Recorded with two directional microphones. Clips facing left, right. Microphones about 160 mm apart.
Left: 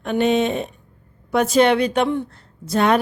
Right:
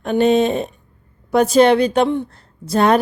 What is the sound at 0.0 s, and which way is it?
Speech, 35° right (ahead or behind).